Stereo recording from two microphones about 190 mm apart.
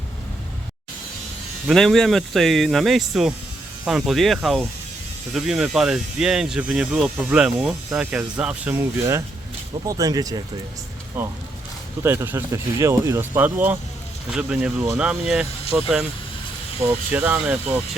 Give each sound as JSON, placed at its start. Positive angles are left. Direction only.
{"t": 1.6, "sound": "speech", "side_deg": 0}